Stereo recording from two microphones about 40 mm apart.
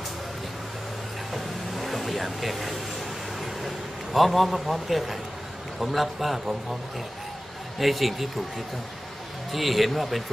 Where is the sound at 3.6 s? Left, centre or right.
Centre.